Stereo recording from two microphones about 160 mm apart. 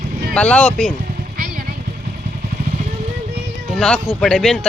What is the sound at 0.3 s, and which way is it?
Speech, 5° left (ahead or behind).